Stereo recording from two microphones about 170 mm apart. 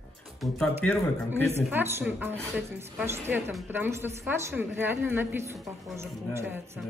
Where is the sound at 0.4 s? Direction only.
5° left (ahead or behind).